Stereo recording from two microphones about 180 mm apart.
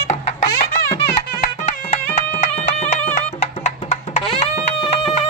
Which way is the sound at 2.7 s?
40° left (ahead or behind).